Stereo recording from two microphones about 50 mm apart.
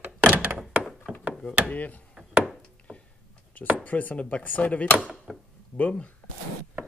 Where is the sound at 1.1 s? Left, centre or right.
Right.